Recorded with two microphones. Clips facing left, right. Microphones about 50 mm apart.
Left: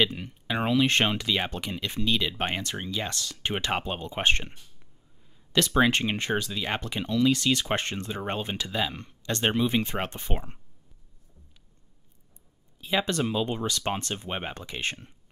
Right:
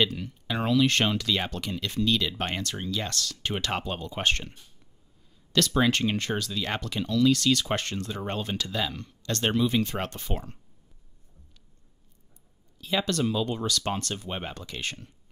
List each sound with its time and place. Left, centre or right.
0.0 s speech: left
12.7 s speech: left